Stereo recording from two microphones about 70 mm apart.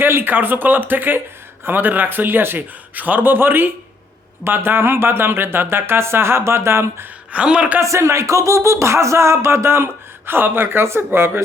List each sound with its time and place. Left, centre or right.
0.0 s a man's voice: right
7.3 s a man's voice: centre
7.8 s speech: right